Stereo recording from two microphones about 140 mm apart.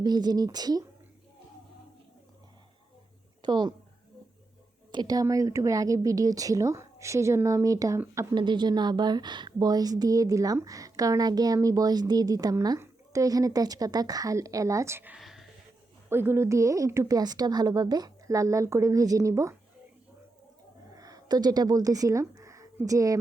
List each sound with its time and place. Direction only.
0.0 s a woman's voice: 30° right (ahead or behind)
3.4 s speech: 30° right (ahead or behind)
4.9 s a woman's voice: 30° right (ahead or behind)
8.4 s a woman's voice: 30° right (ahead or behind); by 15.2 s 15° right (ahead or behind)
15.2 s a sound: centre (ahead or behind)
16.0 s a woman's voice: 15° right (ahead or behind)
20.9 s speech: 25° right (ahead or behind)